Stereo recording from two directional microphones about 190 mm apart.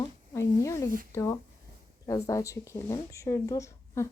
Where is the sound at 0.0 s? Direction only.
15° left (ahead or behind).